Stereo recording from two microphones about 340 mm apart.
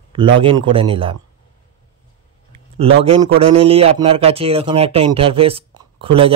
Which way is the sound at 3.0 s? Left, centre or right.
Centre.